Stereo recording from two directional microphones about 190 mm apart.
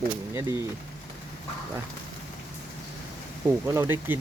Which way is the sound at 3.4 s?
15° right (ahead or behind).